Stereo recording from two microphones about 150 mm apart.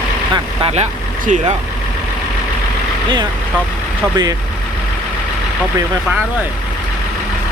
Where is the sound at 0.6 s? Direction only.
50° right (ahead or behind).